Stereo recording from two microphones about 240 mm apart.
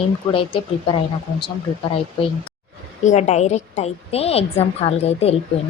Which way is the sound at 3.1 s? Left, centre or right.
Left.